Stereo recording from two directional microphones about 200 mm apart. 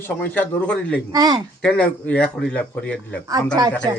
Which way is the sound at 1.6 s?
5° left (ahead or behind).